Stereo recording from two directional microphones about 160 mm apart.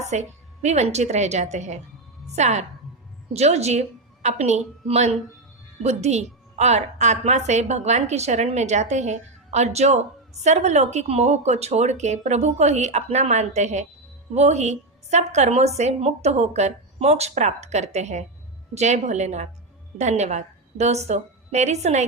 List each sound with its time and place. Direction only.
0.0 s a woman's voice: 45° right (ahead or behind)